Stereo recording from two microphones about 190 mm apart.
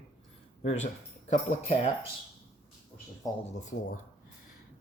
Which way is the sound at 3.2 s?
20° left (ahead or behind).